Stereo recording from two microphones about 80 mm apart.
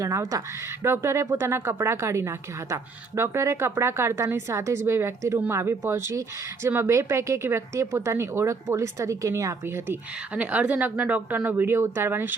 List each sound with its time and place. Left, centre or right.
0.0 s speech: right
0.9 s speech: right
9.6 s speech: right
10.3 s speech: centre